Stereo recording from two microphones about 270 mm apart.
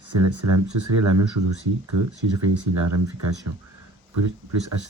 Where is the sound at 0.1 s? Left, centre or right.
Right.